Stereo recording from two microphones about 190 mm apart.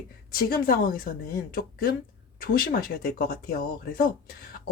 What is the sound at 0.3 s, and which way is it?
Speech, 50° left (ahead or behind).